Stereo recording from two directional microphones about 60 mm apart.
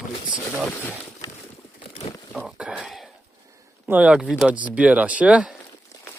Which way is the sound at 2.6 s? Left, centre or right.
Centre.